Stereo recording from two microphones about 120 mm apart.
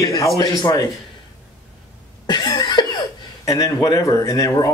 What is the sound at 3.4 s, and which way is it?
Speech, 30° left (ahead or behind).